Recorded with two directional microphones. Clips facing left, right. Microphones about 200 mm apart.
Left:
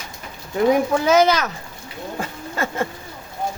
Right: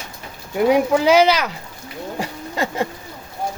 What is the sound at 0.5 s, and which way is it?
Speech, 15° right (ahead or behind).